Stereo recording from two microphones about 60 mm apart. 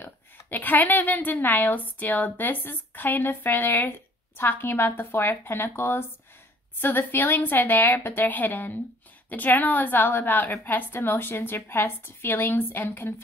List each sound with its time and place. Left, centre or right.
0.0 s a woman's voice: left